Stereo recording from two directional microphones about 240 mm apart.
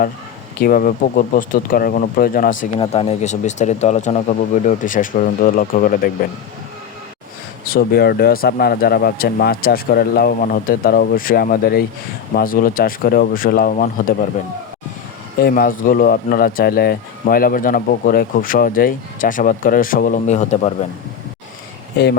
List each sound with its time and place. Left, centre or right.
0.6 s speech: left
2.7 s speech: left
7.7 s speech: left
15.4 s speech: left